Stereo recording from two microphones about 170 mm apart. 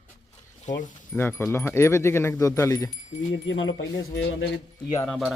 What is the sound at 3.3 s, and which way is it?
Speech, 90° left.